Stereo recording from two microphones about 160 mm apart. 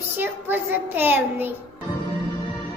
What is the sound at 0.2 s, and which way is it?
A child's voice, 10° right (ahead or behind).